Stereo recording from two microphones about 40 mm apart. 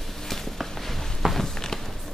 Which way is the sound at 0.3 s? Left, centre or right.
Centre.